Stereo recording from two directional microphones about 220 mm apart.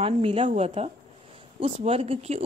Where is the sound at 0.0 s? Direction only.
25° right (ahead or behind).